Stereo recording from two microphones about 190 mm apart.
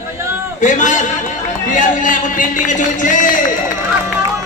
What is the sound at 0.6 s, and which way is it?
A man's voice, 40° left (ahead or behind).